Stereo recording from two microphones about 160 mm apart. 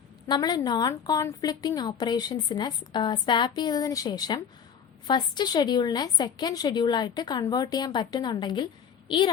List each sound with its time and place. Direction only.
0.3 s a woman's voice: 25° left (ahead or behind)